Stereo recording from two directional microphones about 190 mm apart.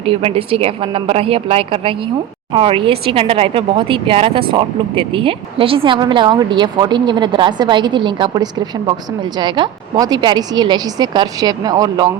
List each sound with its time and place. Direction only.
0.0 s speech: 30° right (ahead or behind)